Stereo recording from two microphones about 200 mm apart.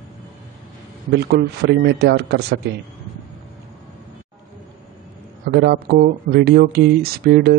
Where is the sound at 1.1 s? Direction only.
55° right (ahead or behind).